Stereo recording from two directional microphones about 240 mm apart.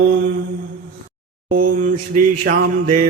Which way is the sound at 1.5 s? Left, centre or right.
Right.